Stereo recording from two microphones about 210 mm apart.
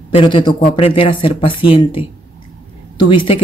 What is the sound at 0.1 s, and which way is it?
Speech, 25° left (ahead or behind).